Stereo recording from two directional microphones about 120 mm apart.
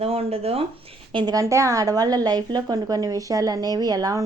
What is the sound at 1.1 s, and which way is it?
A woman's voice, 35° right (ahead or behind).